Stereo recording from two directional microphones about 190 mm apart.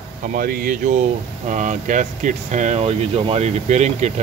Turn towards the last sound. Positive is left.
turn(degrees=-35)  # may be behind; listen again after turning